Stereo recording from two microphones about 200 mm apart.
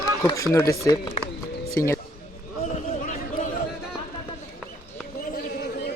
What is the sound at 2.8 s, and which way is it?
Chatter, 40° left (ahead or behind).